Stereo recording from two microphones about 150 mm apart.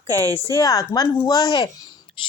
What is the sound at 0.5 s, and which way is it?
Speech, 25° left (ahead or behind).